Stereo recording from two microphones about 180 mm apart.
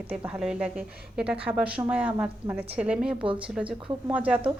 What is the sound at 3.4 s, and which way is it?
Speech, 5° right (ahead or behind).